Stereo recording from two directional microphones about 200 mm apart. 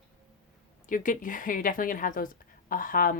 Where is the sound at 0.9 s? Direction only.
40° left (ahead or behind).